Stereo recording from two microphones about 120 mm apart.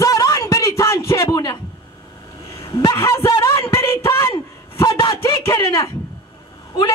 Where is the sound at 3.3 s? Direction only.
25° left (ahead or behind).